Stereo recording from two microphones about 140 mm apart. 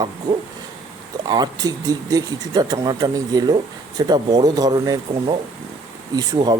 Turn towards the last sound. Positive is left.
turn(degrees=-30)  # may be behind; listen again after turning